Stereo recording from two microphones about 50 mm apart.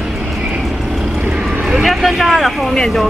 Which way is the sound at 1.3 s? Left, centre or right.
Centre.